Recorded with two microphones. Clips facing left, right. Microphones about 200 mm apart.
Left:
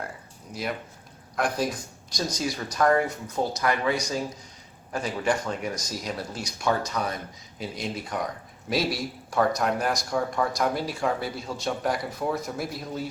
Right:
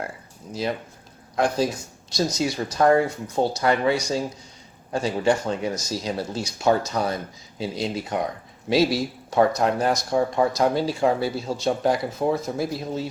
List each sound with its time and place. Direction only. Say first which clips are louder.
0.5 s speech: right 5 dB; 30° right (ahead or behind)
2.1 s speech: right 5 dB; 30° right (ahead or behind)